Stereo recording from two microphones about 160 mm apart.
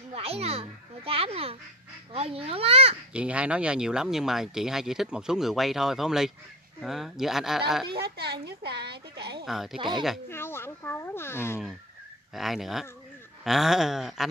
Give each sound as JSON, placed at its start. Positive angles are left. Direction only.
{"t": 0.1, "sound": "a child's voice", "side_deg": -40}
{"t": 3.1, "sound": "speech", "side_deg": -5}
{"t": 7.9, "sound": "speech", "side_deg": -80}
{"t": 9.5, "sound": "speech", "side_deg": 0}
{"t": 9.8, "sound": "speech", "side_deg": -30}
{"t": 10.3, "sound": "speech", "side_deg": 15}
{"t": 12.4, "sound": "speech", "side_deg": 0}